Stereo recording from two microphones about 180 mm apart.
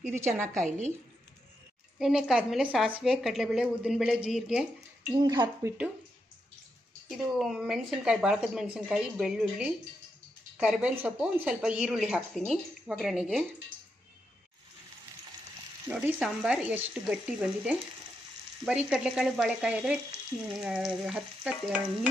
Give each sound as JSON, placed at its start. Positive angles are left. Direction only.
{"t": 0.1, "sound": "speech", "side_deg": -15}
{"t": 0.5, "sound": "a woman's voice", "side_deg": -40}
{"t": 2.0, "sound": "speech", "side_deg": 0}
{"t": 5.2, "sound": "speech", "side_deg": -20}
{"t": 7.1, "sound": "speech", "side_deg": 0}
{"t": 15.9, "sound": "speech", "side_deg": -10}